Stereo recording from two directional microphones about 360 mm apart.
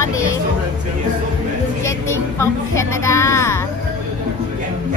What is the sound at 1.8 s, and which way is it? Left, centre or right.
A woman's voice, centre.